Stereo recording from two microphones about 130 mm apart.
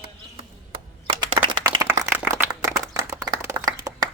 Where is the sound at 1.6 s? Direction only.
20° right (ahead or behind).